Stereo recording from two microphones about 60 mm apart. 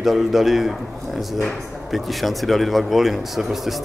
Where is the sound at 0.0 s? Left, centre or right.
Centre.